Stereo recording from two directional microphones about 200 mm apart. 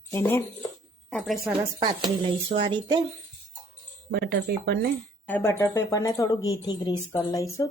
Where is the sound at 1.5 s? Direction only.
25° right (ahead or behind).